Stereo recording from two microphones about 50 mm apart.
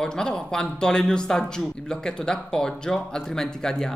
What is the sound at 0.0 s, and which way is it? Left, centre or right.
Speech, centre.